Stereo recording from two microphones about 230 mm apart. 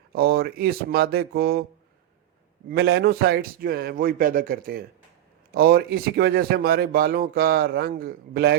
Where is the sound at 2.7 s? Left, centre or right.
Right.